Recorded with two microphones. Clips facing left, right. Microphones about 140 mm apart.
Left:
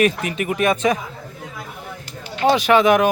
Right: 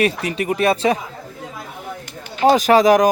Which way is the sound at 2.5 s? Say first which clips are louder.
Right 2 dB; 40° right (ahead or behind).